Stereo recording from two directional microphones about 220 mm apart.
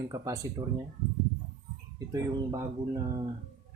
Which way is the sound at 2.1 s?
15° right (ahead or behind).